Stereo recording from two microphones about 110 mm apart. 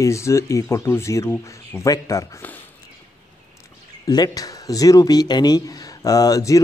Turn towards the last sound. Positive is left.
turn(degrees=30)  # may be behind; listen again after turning